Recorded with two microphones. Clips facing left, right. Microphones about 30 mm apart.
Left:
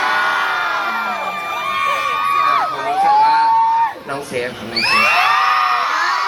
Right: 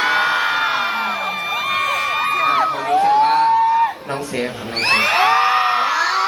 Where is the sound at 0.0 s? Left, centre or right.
Right.